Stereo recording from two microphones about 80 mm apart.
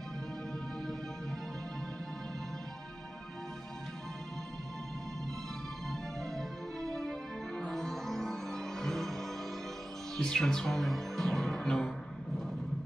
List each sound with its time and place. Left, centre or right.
5.9 s music: centre